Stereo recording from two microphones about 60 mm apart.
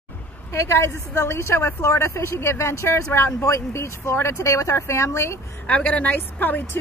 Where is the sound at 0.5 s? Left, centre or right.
Left.